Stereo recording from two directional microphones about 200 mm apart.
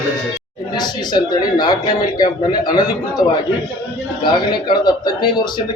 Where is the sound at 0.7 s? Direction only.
20° left (ahead or behind).